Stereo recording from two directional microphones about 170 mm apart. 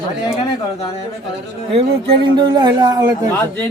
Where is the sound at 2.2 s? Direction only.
25° right (ahead or behind).